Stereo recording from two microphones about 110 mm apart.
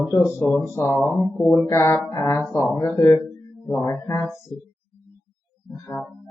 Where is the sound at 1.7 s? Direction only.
20° left (ahead or behind).